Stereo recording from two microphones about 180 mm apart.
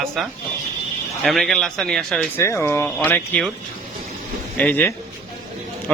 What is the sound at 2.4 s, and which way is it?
A man's voice, 15° left (ahead or behind).